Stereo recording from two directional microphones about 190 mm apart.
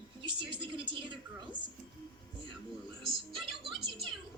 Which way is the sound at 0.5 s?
25° right (ahead or behind).